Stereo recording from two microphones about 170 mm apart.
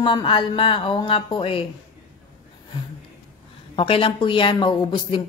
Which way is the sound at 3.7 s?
30° left (ahead or behind).